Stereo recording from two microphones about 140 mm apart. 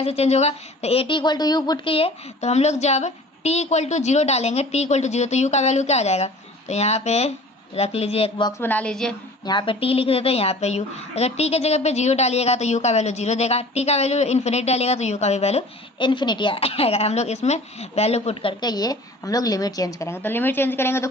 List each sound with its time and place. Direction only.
0.0 s a woman's voice: 45° left (ahead or behind)
8.4 s a woman's voice: 30° left (ahead or behind)
8.6 s a woman's voice: 10° left (ahead or behind)
9.5 s a woman's voice: 35° left (ahead or behind)
16.0 s a woman's voice: 35° left (ahead or behind)
18.6 s a woman's voice: 25° left (ahead or behind)